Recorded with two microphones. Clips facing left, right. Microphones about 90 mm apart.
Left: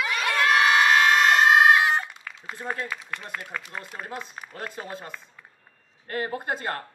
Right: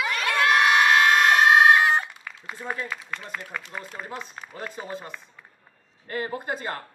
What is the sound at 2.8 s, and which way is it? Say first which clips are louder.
Speech: even; 20° left (ahead or behind).